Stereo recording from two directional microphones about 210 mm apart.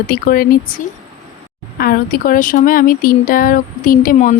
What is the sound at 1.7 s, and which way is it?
Speech, 45° left (ahead or behind).